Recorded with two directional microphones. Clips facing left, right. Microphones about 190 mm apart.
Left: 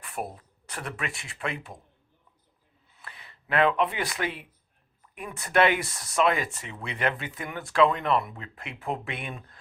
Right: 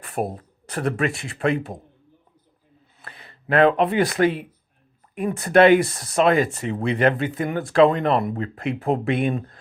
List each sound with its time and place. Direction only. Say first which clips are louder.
0.0 s speech: right 9 dB; 40° right (ahead or behind)
3.0 s speech: right 4 dB; 40° right (ahead or behind)